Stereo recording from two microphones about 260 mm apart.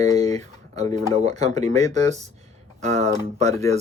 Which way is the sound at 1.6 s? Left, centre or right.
Right.